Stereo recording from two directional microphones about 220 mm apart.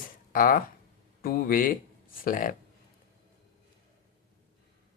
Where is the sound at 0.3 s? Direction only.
40° left (ahead or behind).